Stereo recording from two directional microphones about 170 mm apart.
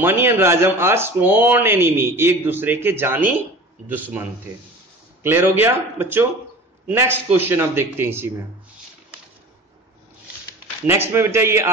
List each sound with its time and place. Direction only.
0.0 s a man's voice: 15° right (ahead or behind)
10.9 s a man's voice: 15° right (ahead or behind)